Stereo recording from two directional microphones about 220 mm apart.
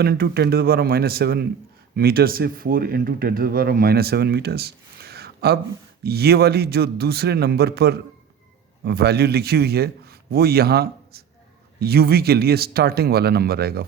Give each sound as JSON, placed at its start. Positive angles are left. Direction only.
{"t": 0.0, "sound": "a man's voice", "side_deg": -45}